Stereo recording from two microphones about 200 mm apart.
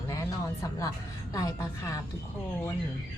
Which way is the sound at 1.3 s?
15° left (ahead or behind).